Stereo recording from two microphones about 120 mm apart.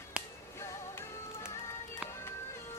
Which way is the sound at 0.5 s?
20° left (ahead or behind).